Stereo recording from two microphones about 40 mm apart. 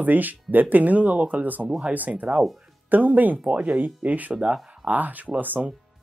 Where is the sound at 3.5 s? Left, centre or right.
Right.